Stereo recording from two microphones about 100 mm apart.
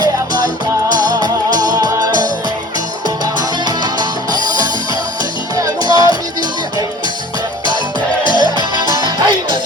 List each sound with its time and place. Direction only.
0.9 s music: 45° right (ahead or behind)
3.3 s music: 40° right (ahead or behind)
8.3 s music: 45° right (ahead or behind)